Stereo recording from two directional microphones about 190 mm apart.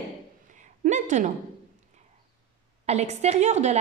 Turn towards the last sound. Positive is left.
turn(degrees=-35)  # may be behind; listen again after turning